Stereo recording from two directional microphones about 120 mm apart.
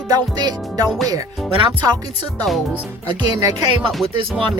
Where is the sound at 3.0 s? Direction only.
35° right (ahead or behind).